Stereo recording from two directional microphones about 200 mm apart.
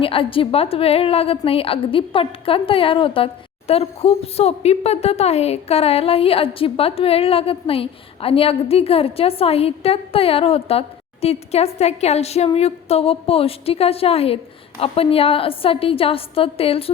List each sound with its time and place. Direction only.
0.0 s a woman's voice: 25° left (ahead or behind)